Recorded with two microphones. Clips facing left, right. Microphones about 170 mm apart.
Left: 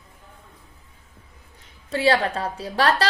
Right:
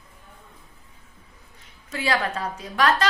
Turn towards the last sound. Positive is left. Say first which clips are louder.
# left 1 dB
turn(degrees=35)  # may be behind; listen again after turning